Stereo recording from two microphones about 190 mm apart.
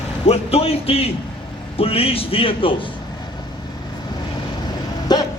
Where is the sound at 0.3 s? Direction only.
30° left (ahead or behind).